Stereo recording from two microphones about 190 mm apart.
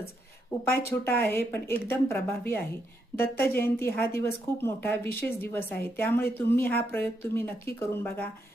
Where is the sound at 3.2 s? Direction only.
55° left (ahead or behind).